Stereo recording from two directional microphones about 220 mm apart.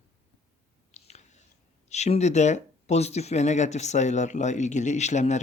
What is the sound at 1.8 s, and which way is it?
Speech, 30° left (ahead or behind).